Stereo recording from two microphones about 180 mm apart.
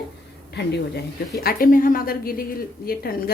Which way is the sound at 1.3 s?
55° left (ahead or behind).